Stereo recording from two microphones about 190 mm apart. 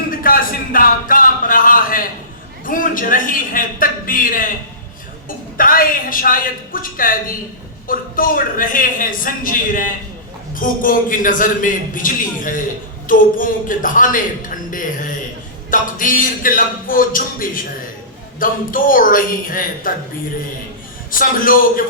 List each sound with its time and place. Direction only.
0.1 s a sound: 50° left (ahead or behind)
2.6 s a man's voice: 45° left (ahead or behind)
5.5 s a man's voice: 45° left (ahead or behind)
21.1 s a man's voice: 45° left (ahead or behind)